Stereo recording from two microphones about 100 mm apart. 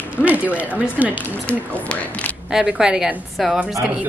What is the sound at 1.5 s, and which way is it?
Speech, 10° left (ahead or behind).